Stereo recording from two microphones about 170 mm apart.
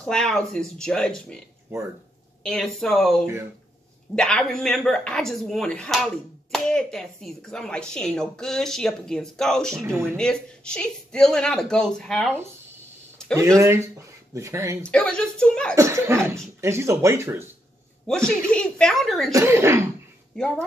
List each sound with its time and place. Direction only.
0.0 s speech: 5° left (ahead or behind)
1.7 s speech: 15° right (ahead or behind)
2.4 s speech: 5° left (ahead or behind)
13.3 s speech: 15° right (ahead or behind)
14.8 s speech: 5° left (ahead or behind)
15.7 s speech: 15° right (ahead or behind)
18.0 s speech: 5° left (ahead or behind)
19.3 s speech: 15° right (ahead or behind)
20.3 s speech: 5° left (ahead or behind)